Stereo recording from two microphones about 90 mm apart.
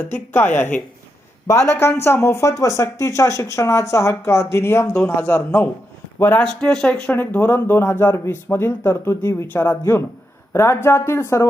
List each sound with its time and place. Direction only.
0.0 s speech: 20° left (ahead or behind)
6.4 s speech: 5° left (ahead or behind)
7.1 s speech: 20° left (ahead or behind)